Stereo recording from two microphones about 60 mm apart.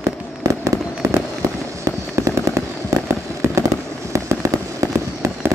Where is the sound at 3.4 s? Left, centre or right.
Right.